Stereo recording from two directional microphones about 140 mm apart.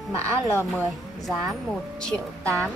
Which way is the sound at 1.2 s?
Centre (ahead or behind).